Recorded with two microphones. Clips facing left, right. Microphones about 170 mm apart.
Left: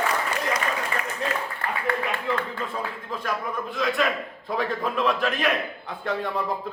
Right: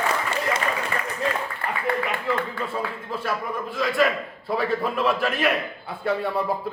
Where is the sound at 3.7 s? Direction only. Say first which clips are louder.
Right 3 dB; centre (ahead or behind).